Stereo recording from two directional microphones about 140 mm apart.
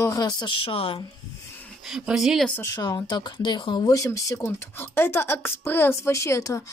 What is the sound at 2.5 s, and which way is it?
Speech, 20° left (ahead or behind).